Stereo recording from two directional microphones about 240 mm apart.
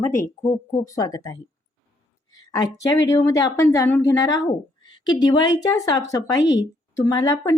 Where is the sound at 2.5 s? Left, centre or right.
Centre.